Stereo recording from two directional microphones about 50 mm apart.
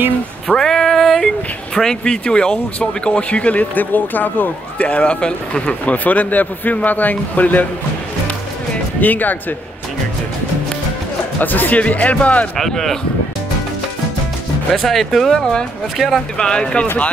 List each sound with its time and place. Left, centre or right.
0.5 s female singing: centre
1.8 s speech: centre
6.0 s speech: left
9.0 s speech: left
11.3 s speech: left
12.5 s speech: centre
14.7 s speech: centre
16.3 s speech: centre